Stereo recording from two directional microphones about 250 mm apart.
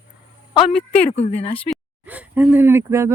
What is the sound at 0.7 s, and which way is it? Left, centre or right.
Speech, centre.